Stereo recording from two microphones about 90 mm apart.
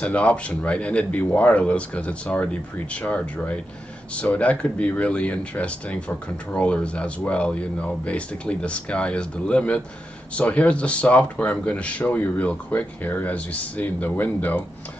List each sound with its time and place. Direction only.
0.0 s speech: 15° left (ahead or behind)